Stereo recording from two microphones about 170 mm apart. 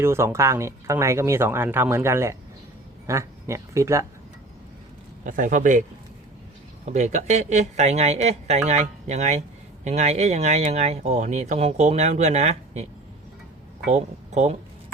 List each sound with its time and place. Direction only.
0.0 s speech: 15° right (ahead or behind)
5.2 s speech: 50° right (ahead or behind)
6.8 s speech: 45° right (ahead or behind)
13.9 s speech: 40° right (ahead or behind)